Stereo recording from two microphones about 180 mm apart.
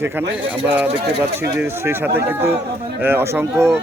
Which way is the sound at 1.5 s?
15° right (ahead or behind).